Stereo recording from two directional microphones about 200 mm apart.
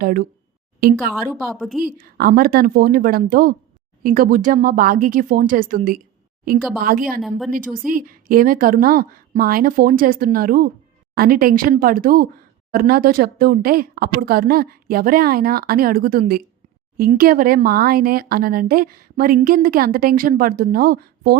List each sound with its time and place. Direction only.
0.0 s speech: 45° right (ahead or behind)
1.5 s speech: centre (ahead or behind)
1.8 s speech: 45° right (ahead or behind)
7.2 s speech: centre (ahead or behind)
7.9 s speech: 45° right (ahead or behind)